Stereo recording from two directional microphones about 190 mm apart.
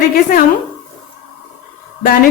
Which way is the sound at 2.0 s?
45° left (ahead or behind).